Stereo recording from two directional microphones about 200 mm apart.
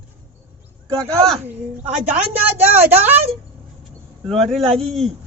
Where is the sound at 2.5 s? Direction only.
10° right (ahead or behind).